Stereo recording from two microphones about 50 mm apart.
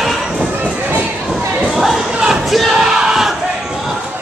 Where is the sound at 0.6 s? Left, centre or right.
Right.